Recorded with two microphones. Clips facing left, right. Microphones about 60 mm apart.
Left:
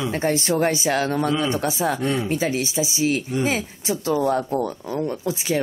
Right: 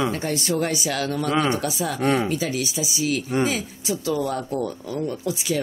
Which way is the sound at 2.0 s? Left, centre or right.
Right.